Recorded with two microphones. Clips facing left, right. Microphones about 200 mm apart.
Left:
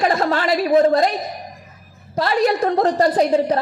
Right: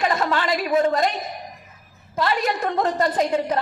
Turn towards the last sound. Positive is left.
turn(degrees=35)  # may be behind; listen again after turning